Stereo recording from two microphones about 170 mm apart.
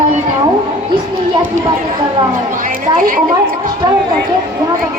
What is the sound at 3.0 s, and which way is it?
Speech, 55° right (ahead or behind).